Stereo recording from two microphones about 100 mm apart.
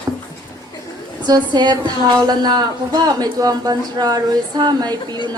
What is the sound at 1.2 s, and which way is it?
A woman's voice, 45° right (ahead or behind).